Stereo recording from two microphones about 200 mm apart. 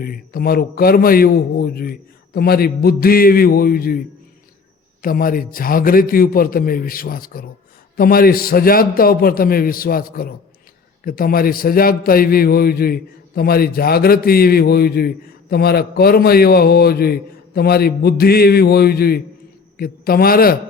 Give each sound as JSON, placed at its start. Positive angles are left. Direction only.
{"t": 0.0, "sound": "a man's voice", "side_deg": 50}
{"t": 5.0, "sound": "a man's voice", "side_deg": 45}